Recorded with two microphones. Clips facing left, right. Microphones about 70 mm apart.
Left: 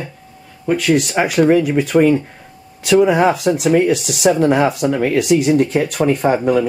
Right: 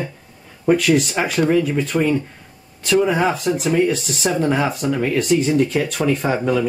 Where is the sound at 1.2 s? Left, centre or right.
Left.